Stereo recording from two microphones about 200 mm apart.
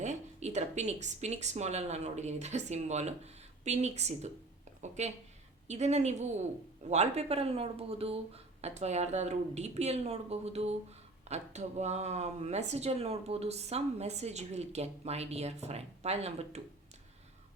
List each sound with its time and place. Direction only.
0.0 s speech: 35° right (ahead or behind)